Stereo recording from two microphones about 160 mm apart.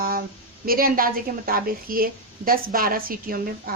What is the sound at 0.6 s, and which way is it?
A woman's voice, 65° right (ahead or behind).